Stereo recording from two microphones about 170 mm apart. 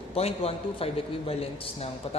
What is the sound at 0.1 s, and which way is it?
A man's voice, 35° left (ahead or behind).